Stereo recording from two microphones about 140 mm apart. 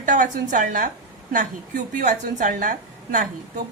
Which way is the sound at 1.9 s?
65° right (ahead or behind).